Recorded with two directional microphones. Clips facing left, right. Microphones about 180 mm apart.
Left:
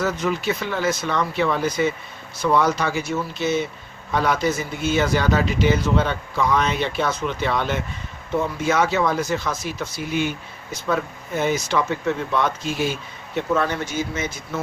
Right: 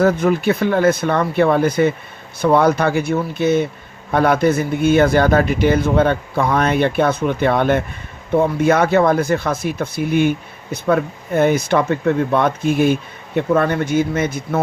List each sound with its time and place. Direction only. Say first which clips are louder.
0.0 s speech: right 8 dB; 55° right (ahead or behind)